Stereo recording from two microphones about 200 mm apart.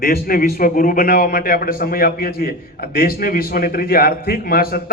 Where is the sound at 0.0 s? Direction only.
45° left (ahead or behind).